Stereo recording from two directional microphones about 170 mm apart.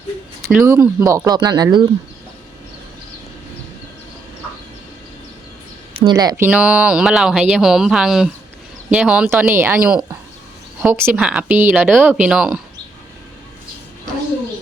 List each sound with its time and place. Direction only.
0.5 s speech: 15° right (ahead or behind)
6.1 s speech: 20° right (ahead or behind); by 12.5 s 5° right (ahead or behind)